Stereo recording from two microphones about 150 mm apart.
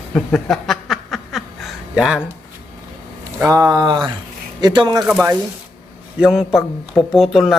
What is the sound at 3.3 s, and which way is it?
Speech, 15° right (ahead or behind).